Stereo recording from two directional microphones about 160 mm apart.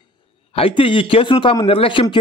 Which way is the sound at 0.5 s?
35° left (ahead or behind).